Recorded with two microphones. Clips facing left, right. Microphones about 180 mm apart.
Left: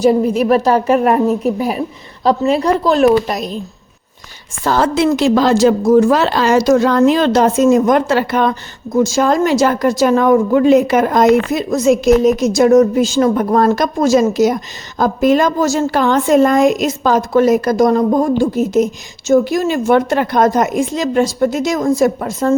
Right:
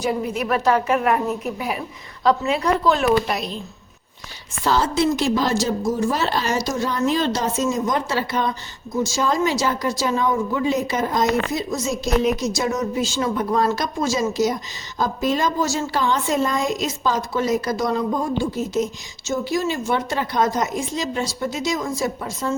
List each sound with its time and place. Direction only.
0.0 s a woman's voice: 35° left (ahead or behind)
4.8 s a woman's voice: 75° left (ahead or behind); by 22.5 s 50° left (ahead or behind)